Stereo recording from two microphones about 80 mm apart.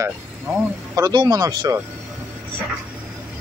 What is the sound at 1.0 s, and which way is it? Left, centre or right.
Speech, right.